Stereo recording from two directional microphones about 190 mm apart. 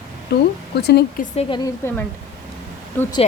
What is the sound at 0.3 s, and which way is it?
Speech, 60° left (ahead or behind).